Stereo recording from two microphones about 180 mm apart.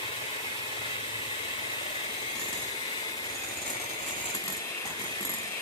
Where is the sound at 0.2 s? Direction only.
30° left (ahead or behind).